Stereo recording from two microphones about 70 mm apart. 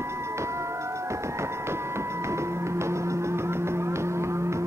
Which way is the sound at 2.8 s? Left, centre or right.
Right.